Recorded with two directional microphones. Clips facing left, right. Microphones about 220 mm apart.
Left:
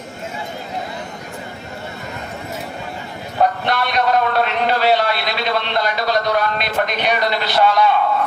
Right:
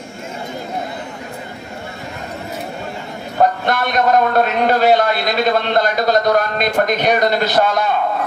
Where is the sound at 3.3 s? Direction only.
45° right (ahead or behind).